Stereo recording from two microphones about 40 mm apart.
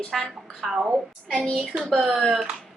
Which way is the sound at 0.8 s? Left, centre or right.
Centre.